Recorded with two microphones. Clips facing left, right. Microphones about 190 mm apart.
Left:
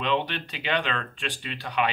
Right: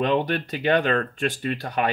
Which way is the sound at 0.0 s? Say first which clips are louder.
Right 5 dB; 45° right (ahead or behind).